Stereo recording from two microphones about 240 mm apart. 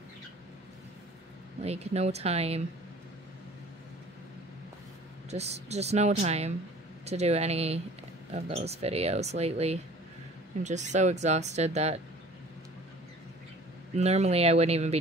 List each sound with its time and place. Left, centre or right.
1.6 s speech: right
5.3 s speech: right
13.9 s speech: right